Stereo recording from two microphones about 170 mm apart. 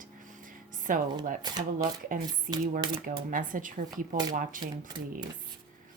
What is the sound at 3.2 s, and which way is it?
Speech, 50° right (ahead or behind).